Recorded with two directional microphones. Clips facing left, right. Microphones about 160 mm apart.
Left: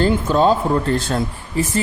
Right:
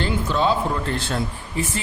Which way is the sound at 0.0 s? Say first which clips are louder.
Left 6 dB; 45° left (ahead or behind).